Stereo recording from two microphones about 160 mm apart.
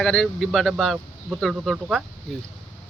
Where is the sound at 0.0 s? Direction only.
5° left (ahead or behind).